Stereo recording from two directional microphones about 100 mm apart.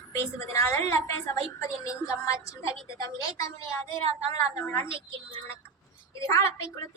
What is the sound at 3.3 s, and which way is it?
A woman's voice, 35° left (ahead or behind).